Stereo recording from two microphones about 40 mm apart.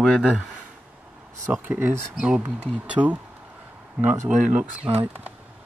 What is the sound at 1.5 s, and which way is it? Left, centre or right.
Speech, right.